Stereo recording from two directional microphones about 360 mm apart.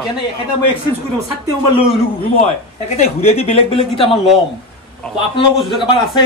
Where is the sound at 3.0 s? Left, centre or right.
Centre.